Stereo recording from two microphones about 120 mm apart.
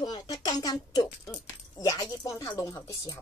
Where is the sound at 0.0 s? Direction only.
35° left (ahead or behind).